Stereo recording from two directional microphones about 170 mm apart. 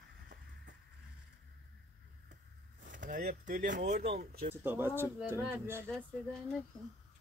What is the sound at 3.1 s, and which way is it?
Speech, 50° right (ahead or behind).